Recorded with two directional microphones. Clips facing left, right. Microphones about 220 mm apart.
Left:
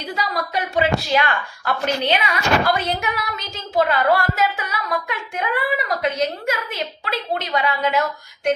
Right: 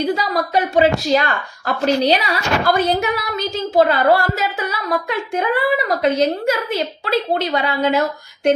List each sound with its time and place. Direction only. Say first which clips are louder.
0.2 s speech: right 5 dB; 35° right (ahead or behind)